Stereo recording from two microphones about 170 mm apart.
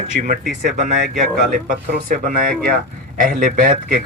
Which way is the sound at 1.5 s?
55° right (ahead or behind).